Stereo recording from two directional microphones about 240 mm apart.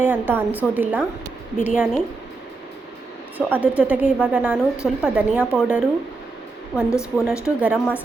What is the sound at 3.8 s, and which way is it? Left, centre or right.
A woman's voice, centre.